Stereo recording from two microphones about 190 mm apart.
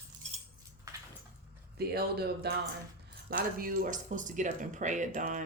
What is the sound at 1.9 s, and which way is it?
Speech, 55° right (ahead or behind).